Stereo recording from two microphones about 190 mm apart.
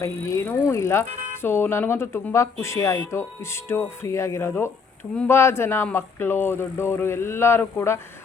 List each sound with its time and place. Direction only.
0.0 s speech: 15° left (ahead or behind)